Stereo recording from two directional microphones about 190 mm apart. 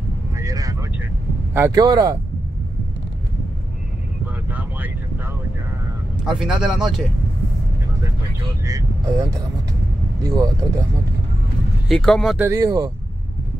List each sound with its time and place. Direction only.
0.4 s vehicle: 20° right (ahead or behind)
1.5 s speech: 15° right (ahead or behind)
4.5 s vehicle: 10° right (ahead or behind)
6.2 s a man's voice: 5° right (ahead or behind)
8.6 s speech: 15° right (ahead or behind)
11.9 s a man's voice: centre (ahead or behind)
12.4 s speech: 15° right (ahead or behind)